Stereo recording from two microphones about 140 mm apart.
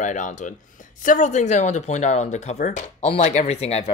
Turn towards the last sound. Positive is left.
turn(degrees=45)  # may be behind; listen again after turning